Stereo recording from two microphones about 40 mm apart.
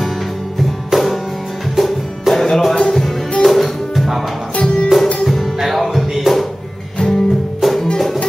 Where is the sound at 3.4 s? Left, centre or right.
Centre.